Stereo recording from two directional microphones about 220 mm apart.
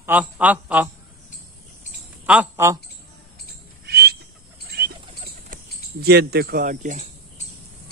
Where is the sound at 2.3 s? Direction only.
10° right (ahead or behind).